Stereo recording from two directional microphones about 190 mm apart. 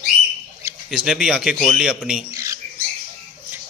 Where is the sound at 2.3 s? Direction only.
15° right (ahead or behind).